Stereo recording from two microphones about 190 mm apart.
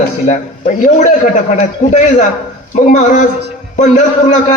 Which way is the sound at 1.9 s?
40° left (ahead or behind).